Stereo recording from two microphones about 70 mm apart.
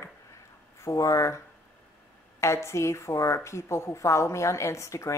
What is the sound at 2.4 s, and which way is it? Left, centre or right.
A woman's voice, left.